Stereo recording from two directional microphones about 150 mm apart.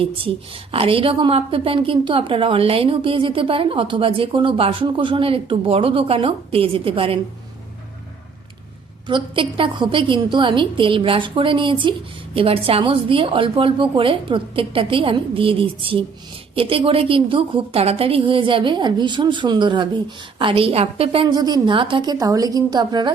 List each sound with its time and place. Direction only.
0.7 s a woman's voice: 40° right (ahead or behind)
9.0 s a woman's voice: 35° right (ahead or behind)
21.3 s a woman's voice: 25° right (ahead or behind)